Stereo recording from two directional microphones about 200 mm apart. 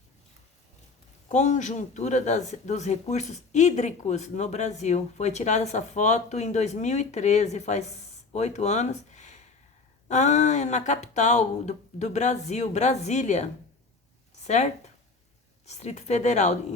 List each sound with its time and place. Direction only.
1.3 s speech: 35° left (ahead or behind)